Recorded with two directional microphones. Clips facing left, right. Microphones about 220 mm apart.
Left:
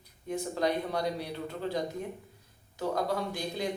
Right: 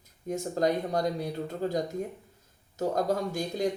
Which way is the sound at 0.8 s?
45° right (ahead or behind).